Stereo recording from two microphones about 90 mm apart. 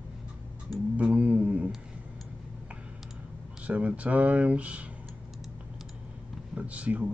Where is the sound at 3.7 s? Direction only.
15° right (ahead or behind).